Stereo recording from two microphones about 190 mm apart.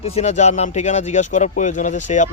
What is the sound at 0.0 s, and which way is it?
Speech, 35° left (ahead or behind).